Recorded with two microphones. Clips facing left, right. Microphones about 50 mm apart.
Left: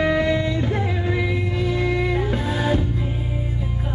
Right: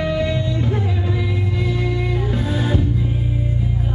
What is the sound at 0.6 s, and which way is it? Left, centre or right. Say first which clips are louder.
Music: right 1 dB; left.